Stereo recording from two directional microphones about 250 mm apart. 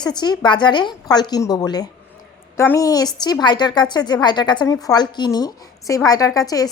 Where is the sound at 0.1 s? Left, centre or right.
Centre.